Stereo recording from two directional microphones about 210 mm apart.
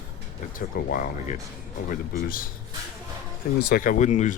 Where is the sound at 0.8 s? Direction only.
45° left (ahead or behind).